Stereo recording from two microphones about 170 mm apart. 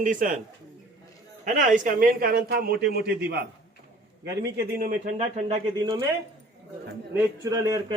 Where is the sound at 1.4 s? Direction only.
50° right (ahead or behind); by 3.5 s 70° right (ahead or behind).